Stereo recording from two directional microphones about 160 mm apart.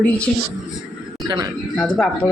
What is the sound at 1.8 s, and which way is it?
Speech, 5° left (ahead or behind).